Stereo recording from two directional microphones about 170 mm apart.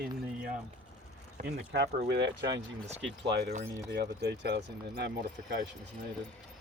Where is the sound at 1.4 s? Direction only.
85° right.